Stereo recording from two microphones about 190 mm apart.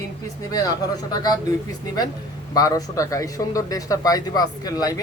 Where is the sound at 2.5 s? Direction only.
20° left (ahead or behind).